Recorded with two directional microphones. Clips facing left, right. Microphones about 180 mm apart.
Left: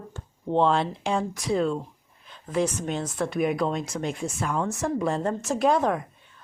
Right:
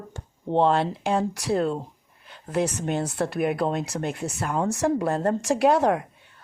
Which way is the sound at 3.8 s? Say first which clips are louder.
Right 1 dB; 60° right (ahead or behind).